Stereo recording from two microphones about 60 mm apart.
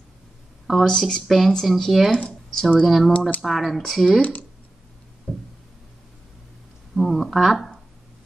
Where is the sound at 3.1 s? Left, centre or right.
Left.